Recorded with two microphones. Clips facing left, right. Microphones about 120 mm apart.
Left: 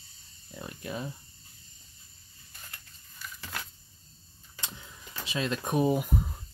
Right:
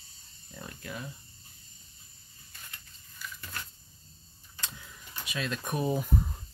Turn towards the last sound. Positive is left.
turn(degrees=10)  # may be behind; listen again after turning